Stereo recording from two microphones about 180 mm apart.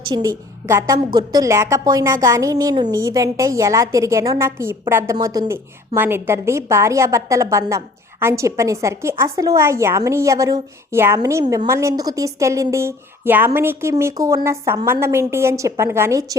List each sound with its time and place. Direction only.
0.1 s a woman's voice: 20° right (ahead or behind)